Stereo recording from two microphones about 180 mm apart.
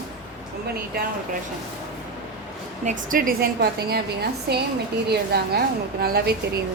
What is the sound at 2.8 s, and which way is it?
A woman's voice, 45° right (ahead or behind).